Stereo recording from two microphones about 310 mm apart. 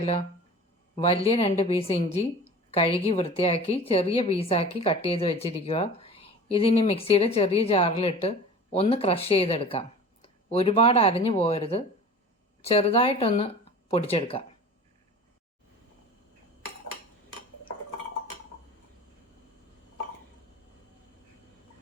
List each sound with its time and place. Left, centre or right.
0.0 s a woman's voice: centre